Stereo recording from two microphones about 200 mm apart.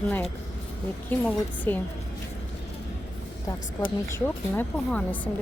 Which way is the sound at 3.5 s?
15° left (ahead or behind).